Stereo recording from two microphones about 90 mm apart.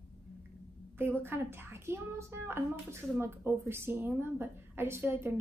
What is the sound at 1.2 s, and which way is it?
A woman's voice, 25° right (ahead or behind).